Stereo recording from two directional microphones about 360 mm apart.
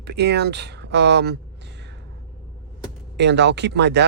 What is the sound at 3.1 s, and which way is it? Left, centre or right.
Speech, right.